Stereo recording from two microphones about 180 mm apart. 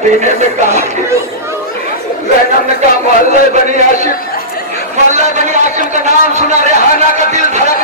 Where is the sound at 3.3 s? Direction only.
40° right (ahead or behind).